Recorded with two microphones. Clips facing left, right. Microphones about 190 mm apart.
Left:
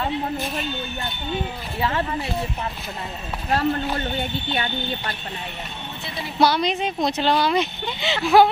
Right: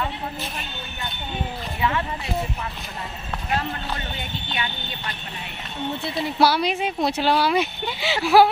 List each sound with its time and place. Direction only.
1.8 s speech: 35° left (ahead or behind)
4.5 s speech: 40° left (ahead or behind)
6.4 s speech: 5° right (ahead or behind)